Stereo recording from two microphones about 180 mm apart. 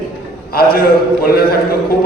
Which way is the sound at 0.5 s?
55° left (ahead or behind).